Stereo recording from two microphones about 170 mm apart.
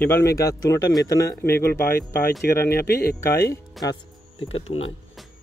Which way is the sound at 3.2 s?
20° left (ahead or behind).